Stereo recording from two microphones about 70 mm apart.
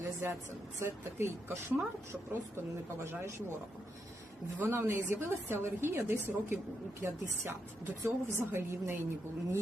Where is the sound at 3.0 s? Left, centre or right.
Right.